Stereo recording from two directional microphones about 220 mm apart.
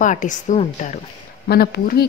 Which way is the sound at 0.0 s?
35° left (ahead or behind).